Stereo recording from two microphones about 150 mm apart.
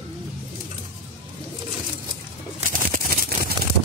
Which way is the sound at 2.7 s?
70° right (ahead or behind).